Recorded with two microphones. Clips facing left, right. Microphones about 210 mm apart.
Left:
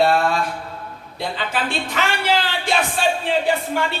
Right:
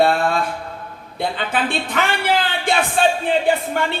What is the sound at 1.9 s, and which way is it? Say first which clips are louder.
Speech: even; 55° right (ahead or behind).